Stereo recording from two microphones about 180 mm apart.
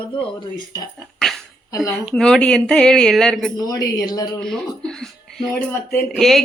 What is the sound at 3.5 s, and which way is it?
Speech, 20° left (ahead or behind).